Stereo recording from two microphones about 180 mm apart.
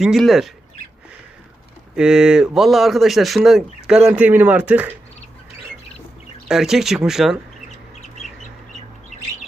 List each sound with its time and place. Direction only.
0.0 s speech: centre (ahead or behind)
2.0 s speech: 5° right (ahead or behind)
6.5 s speech: centre (ahead or behind)